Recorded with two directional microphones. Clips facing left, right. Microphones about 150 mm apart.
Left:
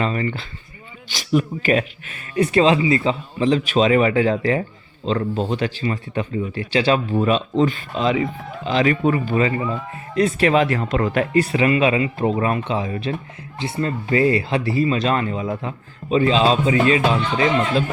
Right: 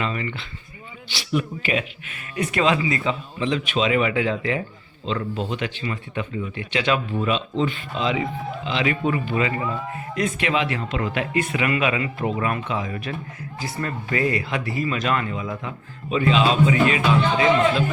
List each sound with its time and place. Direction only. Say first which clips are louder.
0.0 s speech: left 5 dB; 40° left (ahead or behind)